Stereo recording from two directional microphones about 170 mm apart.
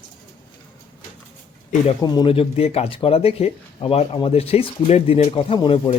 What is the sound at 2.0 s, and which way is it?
Speech, 30° left (ahead or behind).